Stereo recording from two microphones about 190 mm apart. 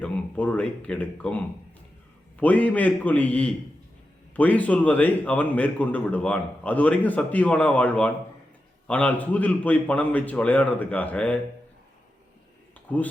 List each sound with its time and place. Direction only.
0.0 s a man's voice: 5° left (ahead or behind)
2.4 s a man's voice: 5° left (ahead or behind)
12.9 s a man's voice: 10° left (ahead or behind)